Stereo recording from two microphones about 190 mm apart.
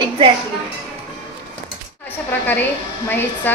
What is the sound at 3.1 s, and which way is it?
Speech, 10° left (ahead or behind).